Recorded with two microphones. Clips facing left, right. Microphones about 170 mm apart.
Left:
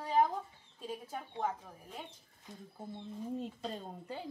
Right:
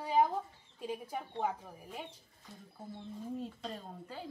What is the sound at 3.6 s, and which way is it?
Speech, 25° left (ahead or behind).